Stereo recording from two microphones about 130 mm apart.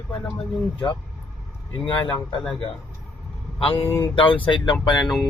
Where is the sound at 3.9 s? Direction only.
20° left (ahead or behind).